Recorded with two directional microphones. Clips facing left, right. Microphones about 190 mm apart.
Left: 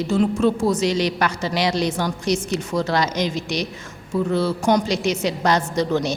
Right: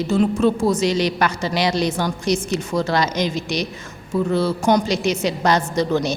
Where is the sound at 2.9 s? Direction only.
10° right (ahead or behind).